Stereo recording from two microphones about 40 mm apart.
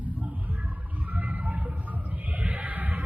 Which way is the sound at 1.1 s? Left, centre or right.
Right.